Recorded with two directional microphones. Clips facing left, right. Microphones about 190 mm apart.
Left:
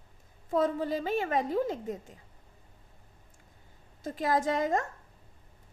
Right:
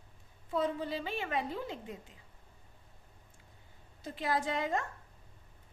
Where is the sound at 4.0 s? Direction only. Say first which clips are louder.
Left 5 dB; 45° left (ahead or behind).